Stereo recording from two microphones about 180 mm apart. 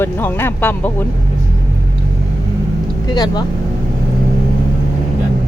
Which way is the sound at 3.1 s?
25° left (ahead or behind).